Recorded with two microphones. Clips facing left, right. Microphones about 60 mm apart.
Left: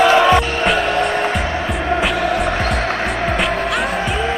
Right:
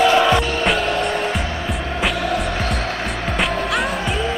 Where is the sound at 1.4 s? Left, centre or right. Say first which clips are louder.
Left 4 dB; left.